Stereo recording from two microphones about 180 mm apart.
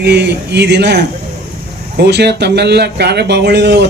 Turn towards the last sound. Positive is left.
turn(degrees=-70)  # may be behind; listen again after turning